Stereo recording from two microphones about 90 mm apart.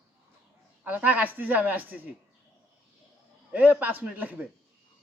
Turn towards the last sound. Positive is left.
turn(degrees=-15)  # may be behind; listen again after turning